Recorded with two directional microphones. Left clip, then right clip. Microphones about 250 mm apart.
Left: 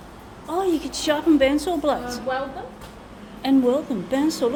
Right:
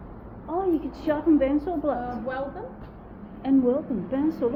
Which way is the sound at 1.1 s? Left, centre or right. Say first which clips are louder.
Left 4 dB; left.